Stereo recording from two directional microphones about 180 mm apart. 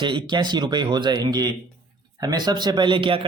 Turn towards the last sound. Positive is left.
turn(degrees=-25)  # may be behind; listen again after turning